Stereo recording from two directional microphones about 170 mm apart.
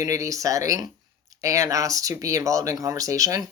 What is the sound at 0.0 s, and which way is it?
Speech, 20° right (ahead or behind).